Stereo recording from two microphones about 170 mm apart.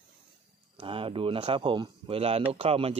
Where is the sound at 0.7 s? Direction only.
30° right (ahead or behind).